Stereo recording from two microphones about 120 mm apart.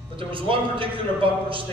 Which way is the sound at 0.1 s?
45° right (ahead or behind).